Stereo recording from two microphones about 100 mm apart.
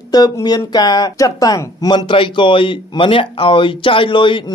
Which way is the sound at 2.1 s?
55° left (ahead or behind).